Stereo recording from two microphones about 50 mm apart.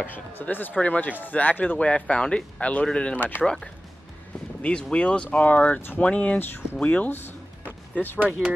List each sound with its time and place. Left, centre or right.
0.0 s speech: left
0.7 s speech: left
3.2 s speech: left
3.4 s speech: centre
7.1 s a sound: left